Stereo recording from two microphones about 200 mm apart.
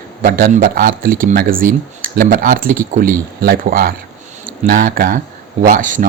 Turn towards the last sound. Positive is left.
turn(degrees=-45)  # may be behind; listen again after turning